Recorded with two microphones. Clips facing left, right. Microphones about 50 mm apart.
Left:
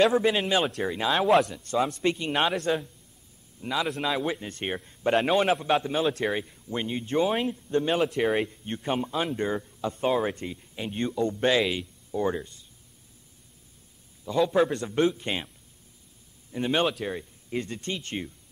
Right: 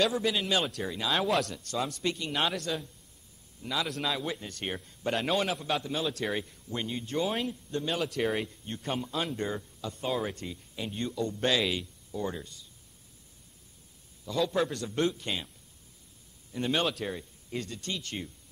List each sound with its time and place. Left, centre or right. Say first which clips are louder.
0.0 s speech: left 6 dB; left
1.2 s a man's voice: left 11 dB; centre
1.6 s speech: left 6 dB; left
3.8 s a man's voice: left 6 dB; centre
4.5 s speech: left 4 dB; left
6.2 s a man's voice: left 4 dB; centre
7.7 s speech: left 8 dB; left
8.2 s a man's voice: left 5 dB; centre
8.5 s speech: left 5 dB; left
14.2 s speech: left 6 dB; left
16.5 s a man's voice: left 4 dB; centre
17.6 s speech: left 4 dB; left